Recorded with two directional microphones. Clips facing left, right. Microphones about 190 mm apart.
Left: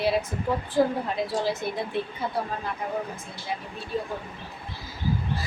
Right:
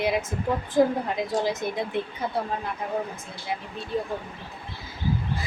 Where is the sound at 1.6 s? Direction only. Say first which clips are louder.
Right 1 dB; 15° right (ahead or behind).